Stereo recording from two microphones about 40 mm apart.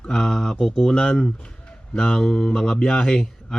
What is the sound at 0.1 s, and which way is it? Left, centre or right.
Speech, centre.